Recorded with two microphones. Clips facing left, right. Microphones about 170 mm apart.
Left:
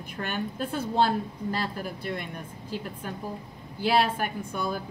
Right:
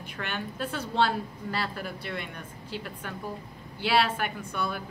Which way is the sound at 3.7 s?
45° left (ahead or behind).